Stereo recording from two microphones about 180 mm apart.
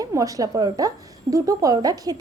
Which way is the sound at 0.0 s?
20° right (ahead or behind).